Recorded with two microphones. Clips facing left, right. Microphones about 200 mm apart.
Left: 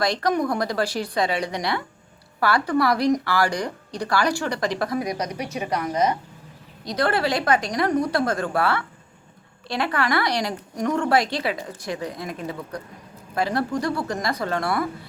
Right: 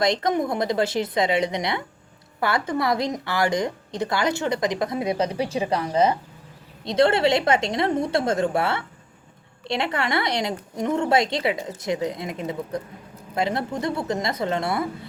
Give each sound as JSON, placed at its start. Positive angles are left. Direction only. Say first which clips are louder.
{"t": 0.0, "sound": "speech", "louder": "right 1 dB", "side_deg": -20}